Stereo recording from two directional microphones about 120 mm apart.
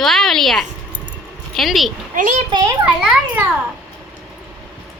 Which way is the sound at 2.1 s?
90° right.